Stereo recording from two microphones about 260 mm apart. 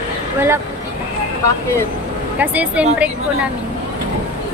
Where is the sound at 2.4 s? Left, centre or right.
Centre.